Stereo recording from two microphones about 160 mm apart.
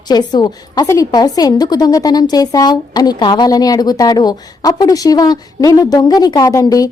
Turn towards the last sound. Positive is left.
turn(degrees=20)  # may be behind; listen again after turning